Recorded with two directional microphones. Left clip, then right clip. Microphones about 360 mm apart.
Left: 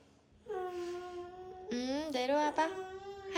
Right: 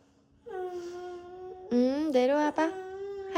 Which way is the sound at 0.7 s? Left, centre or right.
Centre.